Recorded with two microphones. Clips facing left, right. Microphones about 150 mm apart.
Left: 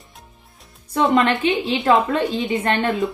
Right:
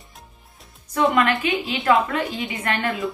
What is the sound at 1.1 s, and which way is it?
A woman's voice, 25° left (ahead or behind).